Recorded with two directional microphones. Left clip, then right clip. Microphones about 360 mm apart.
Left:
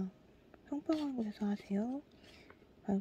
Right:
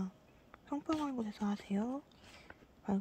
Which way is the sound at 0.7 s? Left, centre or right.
Right.